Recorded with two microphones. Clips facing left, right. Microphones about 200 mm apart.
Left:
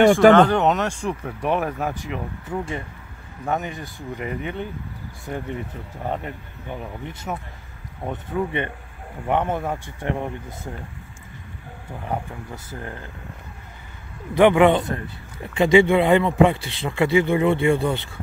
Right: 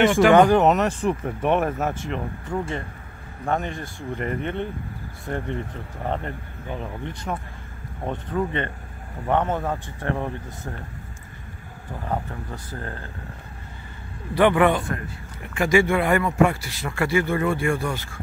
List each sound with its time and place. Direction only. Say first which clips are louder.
0.3 s speech: even; 10° right (ahead or behind); by 10.1 s 10° left (ahead or behind)
12.1 s speech: even; 10° left (ahead or behind)
14.3 s speech: left 3 dB; 20° left (ahead or behind)